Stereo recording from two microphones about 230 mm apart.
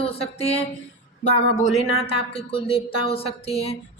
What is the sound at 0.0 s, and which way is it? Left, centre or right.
Speech, left.